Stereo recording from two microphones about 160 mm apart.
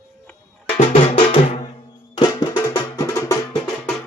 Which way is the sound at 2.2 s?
30° left (ahead or behind).